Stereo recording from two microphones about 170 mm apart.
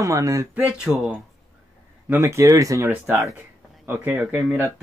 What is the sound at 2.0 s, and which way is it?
Speech, 15° right (ahead or behind).